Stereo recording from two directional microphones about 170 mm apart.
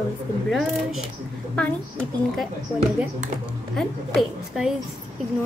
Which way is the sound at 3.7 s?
5° right (ahead or behind).